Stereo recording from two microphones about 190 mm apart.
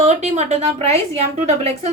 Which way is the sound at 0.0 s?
35° right (ahead or behind).